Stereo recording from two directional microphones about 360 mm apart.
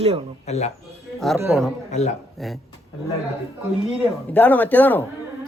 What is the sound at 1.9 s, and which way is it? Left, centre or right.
Speech, centre.